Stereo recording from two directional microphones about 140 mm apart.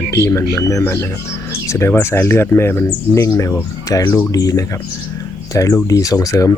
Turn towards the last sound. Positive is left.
turn(degrees=25)  # may be behind; listen again after turning